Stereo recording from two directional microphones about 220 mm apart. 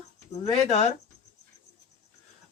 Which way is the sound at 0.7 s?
30° left (ahead or behind).